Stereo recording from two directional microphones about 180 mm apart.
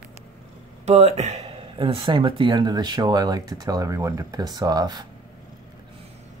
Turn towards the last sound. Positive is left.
turn(degrees=-20)  # may be behind; listen again after turning